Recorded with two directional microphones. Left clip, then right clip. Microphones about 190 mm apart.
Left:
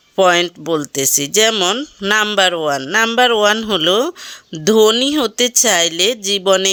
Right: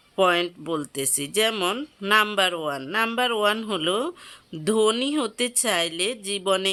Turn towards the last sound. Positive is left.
turn(degrees=30)  # may be behind; listen again after turning